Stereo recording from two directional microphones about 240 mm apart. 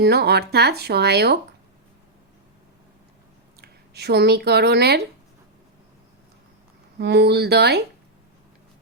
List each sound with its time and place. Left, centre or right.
0.0 s speech: right
3.6 s speech: right
7.0 s speech: right